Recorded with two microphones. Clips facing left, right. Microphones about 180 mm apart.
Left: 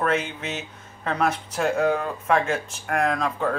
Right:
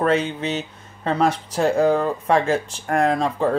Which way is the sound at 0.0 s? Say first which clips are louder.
Right 5 dB; 35° right (ahead or behind).